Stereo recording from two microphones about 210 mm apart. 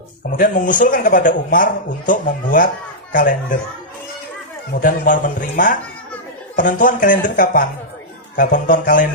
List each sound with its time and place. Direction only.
0.3 s speech: 40° left (ahead or behind)
4.8 s speech: 40° left (ahead or behind)